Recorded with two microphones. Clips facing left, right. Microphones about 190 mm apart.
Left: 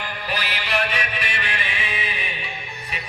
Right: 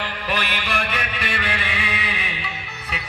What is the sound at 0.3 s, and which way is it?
Music, 55° right (ahead or behind).